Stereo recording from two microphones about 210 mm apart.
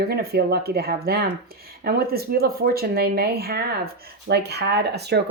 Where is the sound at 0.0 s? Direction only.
45° right (ahead or behind).